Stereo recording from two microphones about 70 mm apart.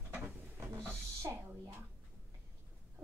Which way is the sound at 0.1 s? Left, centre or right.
Right.